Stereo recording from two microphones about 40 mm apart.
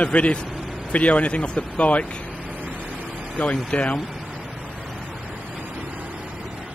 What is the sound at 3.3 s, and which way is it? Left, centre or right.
Speech, left.